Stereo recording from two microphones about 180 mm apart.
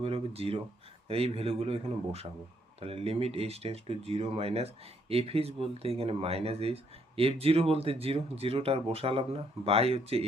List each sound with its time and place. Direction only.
0.0 s speech: 35° right (ahead or behind)